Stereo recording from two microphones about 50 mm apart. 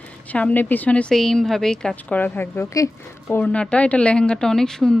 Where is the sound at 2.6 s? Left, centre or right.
Left.